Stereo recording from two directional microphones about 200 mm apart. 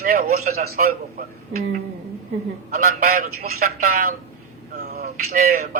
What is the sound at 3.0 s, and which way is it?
A man's voice, 50° right (ahead or behind).